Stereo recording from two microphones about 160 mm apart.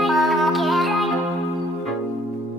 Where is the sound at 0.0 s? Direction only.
Centre (ahead or behind).